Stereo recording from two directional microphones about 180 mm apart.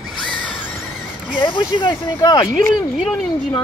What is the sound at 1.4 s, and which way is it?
Speech, 25° left (ahead or behind).